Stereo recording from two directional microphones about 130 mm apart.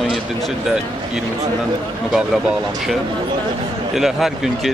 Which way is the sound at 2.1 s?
5° right (ahead or behind).